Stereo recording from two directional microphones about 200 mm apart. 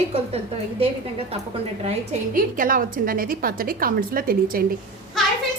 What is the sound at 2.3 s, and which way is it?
A woman's voice, 45° right (ahead or behind).